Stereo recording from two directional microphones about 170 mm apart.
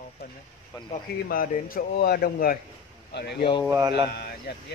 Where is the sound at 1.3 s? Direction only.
60° left (ahead or behind).